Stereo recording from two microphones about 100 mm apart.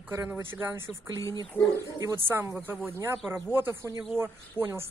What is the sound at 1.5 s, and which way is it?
Speech, 15° left (ahead or behind).